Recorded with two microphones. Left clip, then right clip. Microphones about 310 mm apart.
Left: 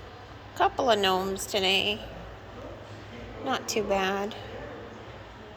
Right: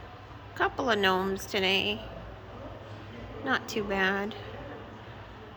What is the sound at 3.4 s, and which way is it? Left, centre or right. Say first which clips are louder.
Speech: left 2 dB; right.